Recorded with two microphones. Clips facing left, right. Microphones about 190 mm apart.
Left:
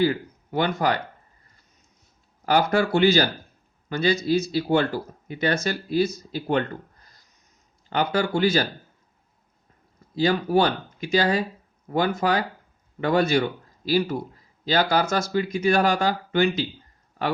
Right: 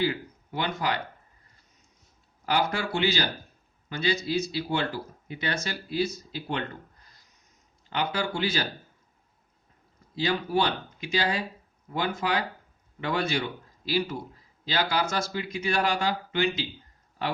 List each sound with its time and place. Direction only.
0.0 s speech: 50° left (ahead or behind)
2.5 s speech: 45° left (ahead or behind)
7.9 s speech: 45° left (ahead or behind)
10.2 s speech: 45° left (ahead or behind)